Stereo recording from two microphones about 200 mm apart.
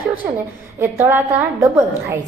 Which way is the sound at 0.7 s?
15° right (ahead or behind).